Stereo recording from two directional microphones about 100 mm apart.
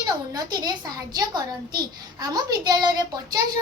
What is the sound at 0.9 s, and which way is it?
A woman's voice, 40° right (ahead or behind).